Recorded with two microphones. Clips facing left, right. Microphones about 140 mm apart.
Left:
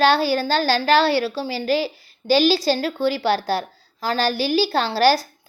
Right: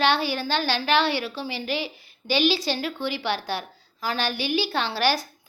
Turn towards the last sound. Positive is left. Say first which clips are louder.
# left 7 dB
turn(degrees=35)  # may be behind; listen again after turning